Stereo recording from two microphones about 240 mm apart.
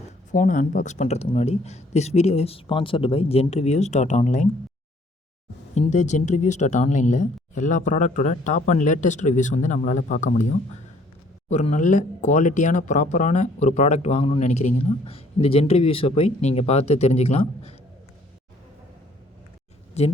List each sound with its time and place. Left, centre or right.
0.3 s speech: left
5.7 s speech: left
11.4 s speech: left
20.0 s speech: left